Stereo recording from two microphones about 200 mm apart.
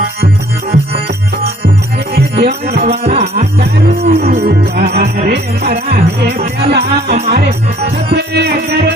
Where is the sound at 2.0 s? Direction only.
55° right (ahead or behind).